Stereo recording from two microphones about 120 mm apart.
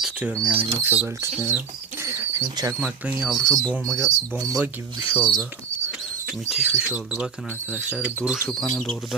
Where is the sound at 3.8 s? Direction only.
25° right (ahead or behind).